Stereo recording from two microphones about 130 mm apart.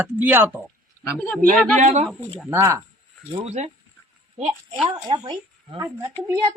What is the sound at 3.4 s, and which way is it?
Speech, 60° right (ahead or behind).